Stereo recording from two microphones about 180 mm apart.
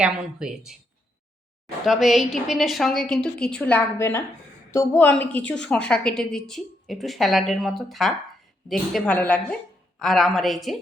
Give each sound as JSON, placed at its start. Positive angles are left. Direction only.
{"t": 0.0, "sound": "a woman's voice", "side_deg": -5}
{"t": 1.8, "sound": "a woman's voice", "side_deg": 0}